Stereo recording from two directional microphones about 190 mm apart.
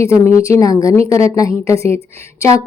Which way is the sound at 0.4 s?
15° left (ahead or behind).